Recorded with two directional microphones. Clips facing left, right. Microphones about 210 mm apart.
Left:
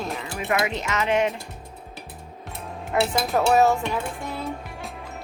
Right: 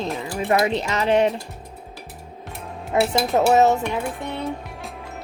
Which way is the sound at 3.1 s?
20° right (ahead or behind).